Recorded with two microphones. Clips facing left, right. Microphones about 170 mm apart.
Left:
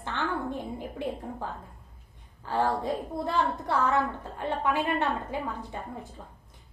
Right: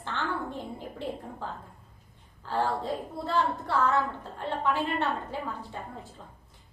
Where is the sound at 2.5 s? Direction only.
15° left (ahead or behind).